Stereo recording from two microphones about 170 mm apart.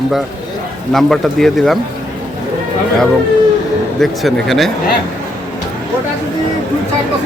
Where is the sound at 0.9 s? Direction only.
Centre (ahead or behind).